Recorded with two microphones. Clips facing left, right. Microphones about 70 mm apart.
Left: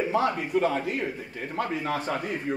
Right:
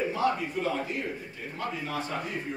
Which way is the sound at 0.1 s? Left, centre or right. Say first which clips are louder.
Left 3 dB; left.